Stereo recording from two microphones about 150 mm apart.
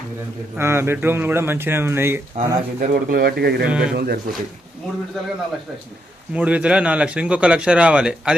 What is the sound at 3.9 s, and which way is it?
Speech, 90° right.